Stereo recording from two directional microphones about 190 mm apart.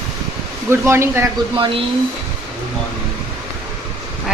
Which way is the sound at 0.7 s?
15° right (ahead or behind).